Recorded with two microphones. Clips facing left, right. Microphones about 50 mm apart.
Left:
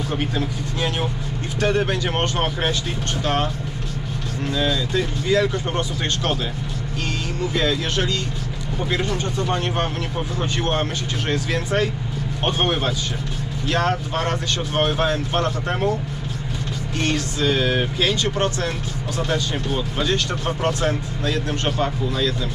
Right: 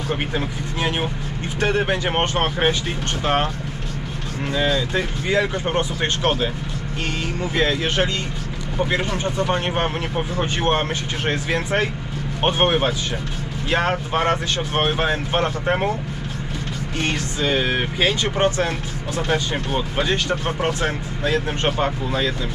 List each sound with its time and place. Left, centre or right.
0.1 s speech: right
4.5 s speech: right
7.5 s speech: right
17.0 s speech: right